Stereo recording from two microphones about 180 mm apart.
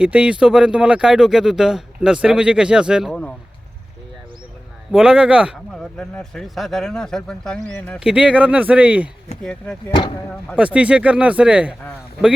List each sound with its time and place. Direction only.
0.0 s speech: 5° right (ahead or behind)
4.9 s speech: 5° right (ahead or behind)
7.9 s speech: 5° right (ahead or behind)
9.4 s speech: 5° left (ahead or behind)
10.6 s speech: 5° right (ahead or behind)